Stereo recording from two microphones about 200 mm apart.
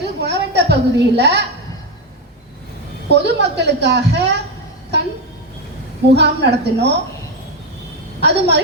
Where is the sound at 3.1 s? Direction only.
55° right (ahead or behind).